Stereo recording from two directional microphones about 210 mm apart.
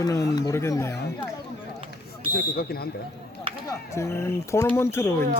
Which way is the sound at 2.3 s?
45° left (ahead or behind).